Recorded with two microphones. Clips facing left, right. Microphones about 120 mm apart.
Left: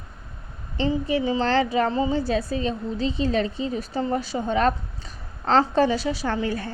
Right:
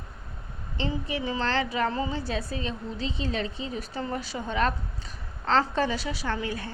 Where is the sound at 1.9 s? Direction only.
25° left (ahead or behind).